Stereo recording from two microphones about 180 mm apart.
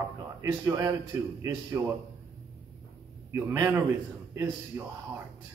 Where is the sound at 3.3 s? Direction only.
15° right (ahead or behind).